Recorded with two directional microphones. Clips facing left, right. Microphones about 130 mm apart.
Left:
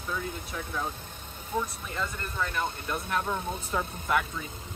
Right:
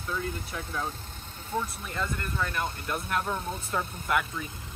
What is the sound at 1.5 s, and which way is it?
Speech, 15° left (ahead or behind).